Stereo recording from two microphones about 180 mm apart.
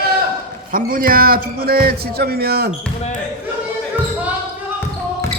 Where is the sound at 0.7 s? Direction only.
50° right (ahead or behind).